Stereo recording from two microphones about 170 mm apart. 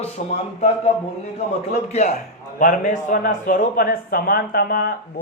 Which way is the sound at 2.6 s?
50° left (ahead or behind).